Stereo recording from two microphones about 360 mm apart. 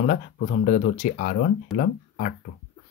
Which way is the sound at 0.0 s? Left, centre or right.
Left.